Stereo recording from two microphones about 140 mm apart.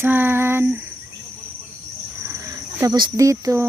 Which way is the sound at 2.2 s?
20° right (ahead or behind).